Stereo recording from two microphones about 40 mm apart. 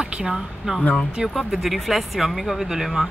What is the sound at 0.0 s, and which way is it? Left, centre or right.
Speech, centre.